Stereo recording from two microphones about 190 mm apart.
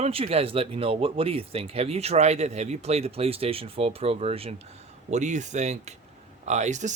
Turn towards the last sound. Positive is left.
turn(degrees=-40)  # may be behind; listen again after turning